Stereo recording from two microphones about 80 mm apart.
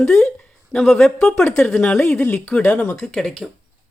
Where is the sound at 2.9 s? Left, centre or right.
Centre.